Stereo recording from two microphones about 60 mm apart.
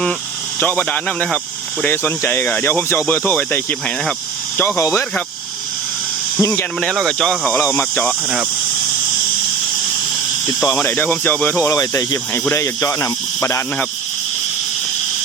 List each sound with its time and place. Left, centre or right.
0.6 s speech: left
0.9 s speech: left
1.9 s speech: left
4.5 s speech: left
4.8 s speech: left
6.4 s speech: left
7.0 s speech: centre
7.6 s speech: left
10.8 s speech: left
11.8 s speech: left